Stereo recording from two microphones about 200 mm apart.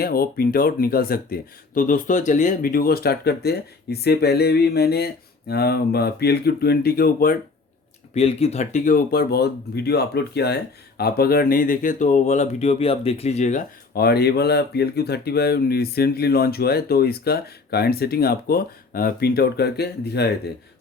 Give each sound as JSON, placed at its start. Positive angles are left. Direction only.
{"t": 0.0, "sound": "speech", "side_deg": 50}
{"t": 8.1, "sound": "speech", "side_deg": 30}